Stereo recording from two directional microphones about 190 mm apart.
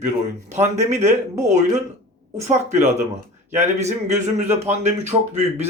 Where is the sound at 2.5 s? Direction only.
35° right (ahead or behind).